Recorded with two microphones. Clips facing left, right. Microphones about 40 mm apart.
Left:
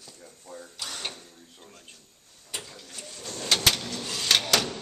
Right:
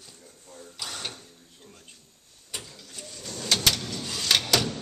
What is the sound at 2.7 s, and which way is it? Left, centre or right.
Bird, centre.